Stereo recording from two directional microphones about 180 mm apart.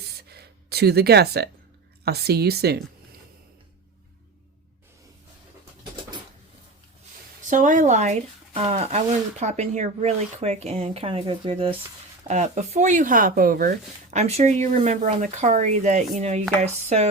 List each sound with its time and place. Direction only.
0.2 s a sound: 60° right (ahead or behind)
2.0 s speech: 60° right (ahead or behind)
7.4 s speech: 45° right (ahead or behind)
12.3 s speech: 40° right (ahead or behind)